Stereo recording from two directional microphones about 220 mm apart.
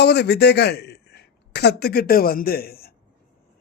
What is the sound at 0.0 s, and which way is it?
Speech, 50° left (ahead or behind).